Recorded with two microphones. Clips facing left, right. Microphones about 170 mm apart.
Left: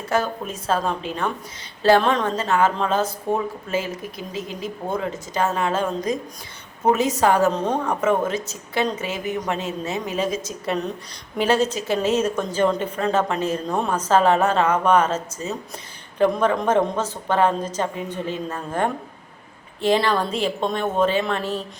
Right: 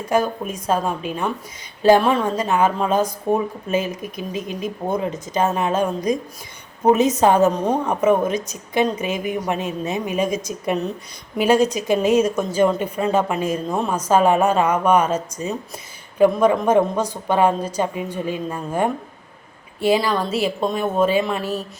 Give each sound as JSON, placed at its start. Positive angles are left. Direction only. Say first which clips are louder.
{"t": 0.1, "sound": "a woman's voice", "louder": "right 3 dB", "side_deg": -15}